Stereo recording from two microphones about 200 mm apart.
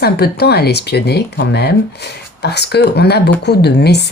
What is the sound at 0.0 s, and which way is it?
Speech, 55° left (ahead or behind).